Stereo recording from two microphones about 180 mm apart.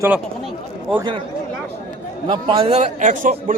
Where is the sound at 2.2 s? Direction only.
25° right (ahead or behind); by 3.5 s 45° right (ahead or behind).